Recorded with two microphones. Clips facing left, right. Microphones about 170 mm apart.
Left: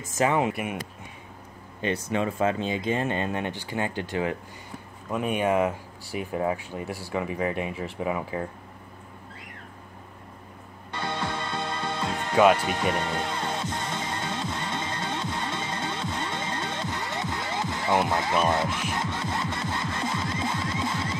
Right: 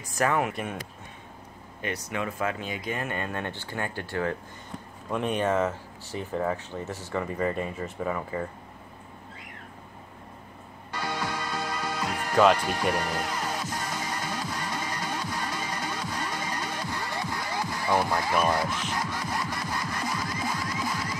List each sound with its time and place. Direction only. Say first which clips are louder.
0.2 s speech: left 2 dB; 20° left (ahead or behind)
0.5 s speech: left 3 dB; 10° left (ahead or behind)
1.8 s speech: left 5 dB; 30° left (ahead or behind); by 8.5 s 10° left (ahead or behind)
10.9 s music: left 1 dB; 25° left (ahead or behind)